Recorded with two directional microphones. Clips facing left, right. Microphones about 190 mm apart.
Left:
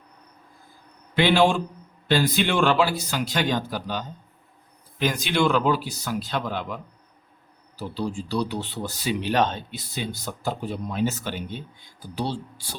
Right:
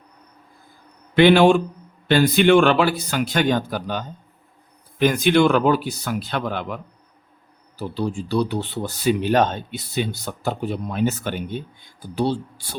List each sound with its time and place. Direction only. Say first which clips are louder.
1.1 s speech: right 6 dB; 60° right (ahead or behind)
7.8 s speech: right 4 dB; 55° right (ahead or behind)